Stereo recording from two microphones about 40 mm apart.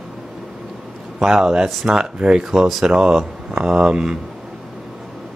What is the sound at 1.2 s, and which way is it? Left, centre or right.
Speech, centre.